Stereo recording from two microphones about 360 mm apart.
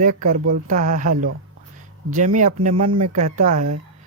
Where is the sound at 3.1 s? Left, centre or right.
Right.